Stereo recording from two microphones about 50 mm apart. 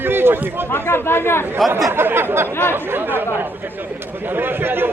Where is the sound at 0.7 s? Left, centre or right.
Left.